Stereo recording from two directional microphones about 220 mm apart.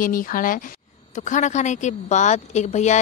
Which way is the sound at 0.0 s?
40° left (ahead or behind).